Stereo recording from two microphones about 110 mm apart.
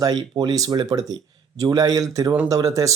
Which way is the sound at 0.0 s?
40° right (ahead or behind).